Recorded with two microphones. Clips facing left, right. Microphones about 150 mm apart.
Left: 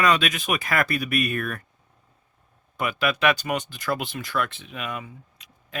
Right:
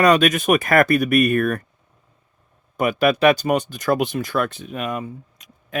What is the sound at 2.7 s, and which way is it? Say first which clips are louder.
Speech: right 7 dB; 45° right (ahead or behind).